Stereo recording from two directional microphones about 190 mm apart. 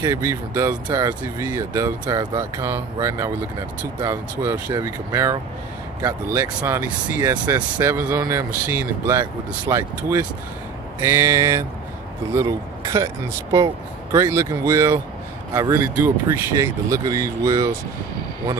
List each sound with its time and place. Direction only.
0.0 s speech: 15° right (ahead or behind)